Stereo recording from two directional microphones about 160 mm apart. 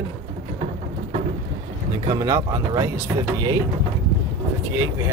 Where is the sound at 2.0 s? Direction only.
25° right (ahead or behind).